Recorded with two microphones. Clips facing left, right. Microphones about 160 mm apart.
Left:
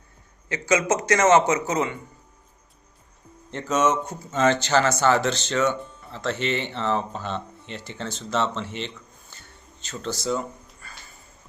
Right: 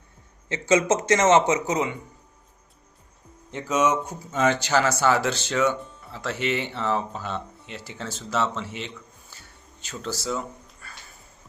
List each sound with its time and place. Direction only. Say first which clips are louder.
0.4 s a man's voice: right 1 dB; 25° right (ahead or behind)
3.5 s speech: left 1 dB; 10° right (ahead or behind)
9.3 s music: left 1 dB; 5° right (ahead or behind)
9.8 s speech: left 2 dB; 10° right (ahead or behind)